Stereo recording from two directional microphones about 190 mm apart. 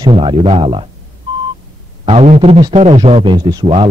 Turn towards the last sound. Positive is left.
turn(degrees=-25)  # may be behind; listen again after turning